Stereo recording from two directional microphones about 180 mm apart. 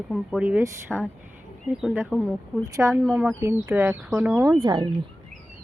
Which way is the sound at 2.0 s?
5° left (ahead or behind).